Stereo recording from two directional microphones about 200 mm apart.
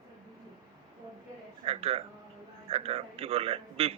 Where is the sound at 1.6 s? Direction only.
30° right (ahead or behind).